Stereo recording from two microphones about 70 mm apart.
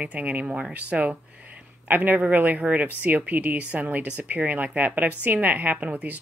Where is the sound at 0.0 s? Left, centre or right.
Right.